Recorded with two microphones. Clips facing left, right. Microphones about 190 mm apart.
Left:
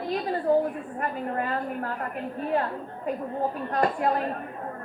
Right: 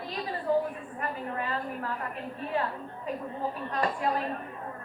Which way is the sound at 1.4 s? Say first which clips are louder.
Left 4 dB; 50° left (ahead or behind).